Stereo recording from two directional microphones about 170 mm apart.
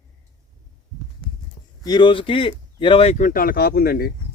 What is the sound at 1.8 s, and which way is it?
Speech, 25° left (ahead or behind).